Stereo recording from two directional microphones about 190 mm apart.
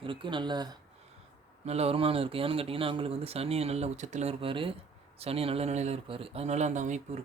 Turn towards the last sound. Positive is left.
turn(degrees=-40)  # may be behind; listen again after turning